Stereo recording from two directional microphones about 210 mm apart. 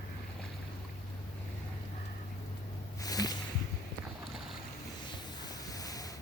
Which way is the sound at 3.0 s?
15° left (ahead or behind).